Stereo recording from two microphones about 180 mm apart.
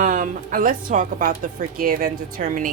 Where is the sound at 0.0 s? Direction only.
45° right (ahead or behind).